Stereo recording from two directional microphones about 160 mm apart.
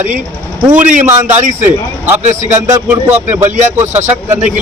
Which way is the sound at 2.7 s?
10° right (ahead or behind).